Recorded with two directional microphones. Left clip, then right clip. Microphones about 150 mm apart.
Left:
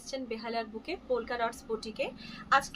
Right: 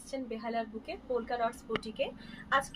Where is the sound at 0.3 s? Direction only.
35° left (ahead or behind).